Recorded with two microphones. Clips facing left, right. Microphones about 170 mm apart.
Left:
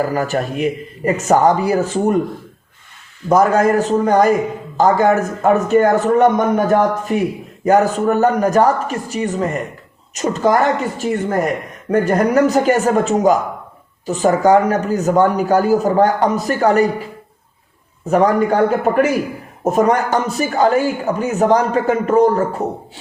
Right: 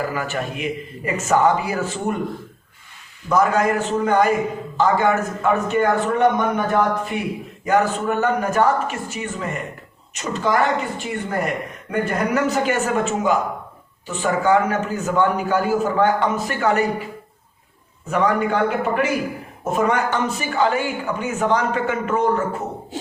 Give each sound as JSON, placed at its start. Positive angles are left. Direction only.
{"t": 0.0, "sound": "a man's voice", "side_deg": 40}
{"t": 3.2, "sound": "a man's voice", "side_deg": 45}
{"t": 18.1, "sound": "a man's voice", "side_deg": 40}